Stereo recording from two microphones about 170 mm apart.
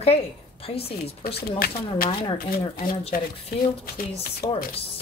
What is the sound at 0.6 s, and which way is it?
Speech, 35° left (ahead or behind).